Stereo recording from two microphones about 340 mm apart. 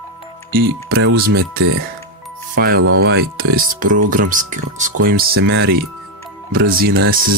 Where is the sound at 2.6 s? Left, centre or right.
Right.